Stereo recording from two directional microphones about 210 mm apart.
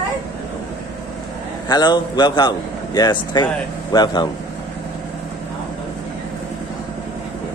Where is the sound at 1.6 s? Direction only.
20° left (ahead or behind).